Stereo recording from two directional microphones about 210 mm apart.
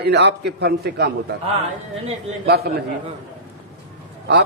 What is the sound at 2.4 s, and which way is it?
Speech, 50° right (ahead or behind).